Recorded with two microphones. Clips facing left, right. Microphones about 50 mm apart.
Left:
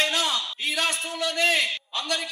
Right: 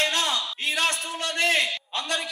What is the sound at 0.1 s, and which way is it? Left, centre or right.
A man's voice, right.